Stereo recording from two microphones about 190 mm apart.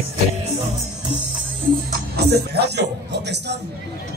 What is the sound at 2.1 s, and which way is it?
Music, 60° right (ahead or behind).